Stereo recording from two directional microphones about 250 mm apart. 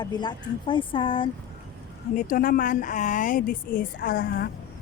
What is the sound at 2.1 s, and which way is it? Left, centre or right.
Speech, left.